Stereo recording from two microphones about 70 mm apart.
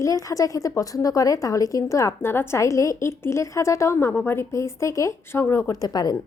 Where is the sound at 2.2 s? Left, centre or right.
Left.